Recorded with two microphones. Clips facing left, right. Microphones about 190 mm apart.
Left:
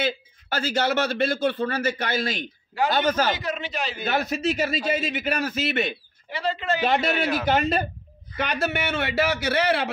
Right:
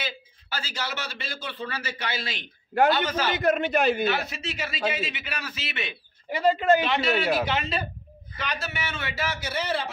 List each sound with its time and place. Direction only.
0.0 s a man's voice: 55° left (ahead or behind)
3.3 s a man's voice: 55° right (ahead or behind)
4.0 s a man's voice: 45° left (ahead or behind); by 9.8 s 70° left (ahead or behind)